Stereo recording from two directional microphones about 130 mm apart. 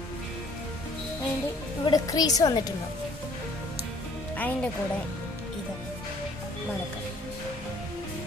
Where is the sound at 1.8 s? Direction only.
30° left (ahead or behind).